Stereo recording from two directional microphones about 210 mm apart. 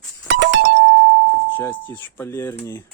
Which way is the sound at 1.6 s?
10° left (ahead or behind).